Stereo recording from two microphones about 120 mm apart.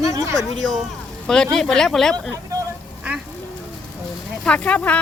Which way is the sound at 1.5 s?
5° left (ahead or behind).